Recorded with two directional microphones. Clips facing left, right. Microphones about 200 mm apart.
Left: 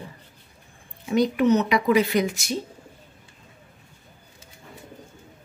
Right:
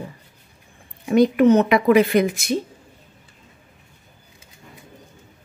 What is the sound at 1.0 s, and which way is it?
Speech, 55° right (ahead or behind).